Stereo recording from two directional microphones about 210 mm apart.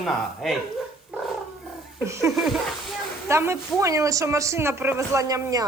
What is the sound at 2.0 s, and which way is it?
Speech, 15° right (ahead or behind).